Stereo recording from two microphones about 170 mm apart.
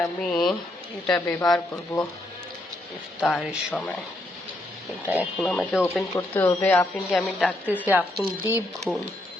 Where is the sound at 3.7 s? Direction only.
5° left (ahead or behind).